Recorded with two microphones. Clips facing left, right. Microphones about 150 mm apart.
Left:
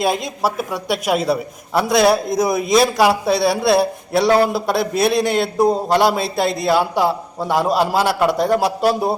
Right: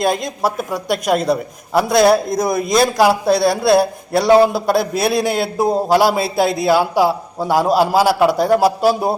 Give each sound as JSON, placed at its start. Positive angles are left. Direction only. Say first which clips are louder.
{"t": 0.0, "sound": "a man's voice", "louder": "right 1 dB", "side_deg": 5}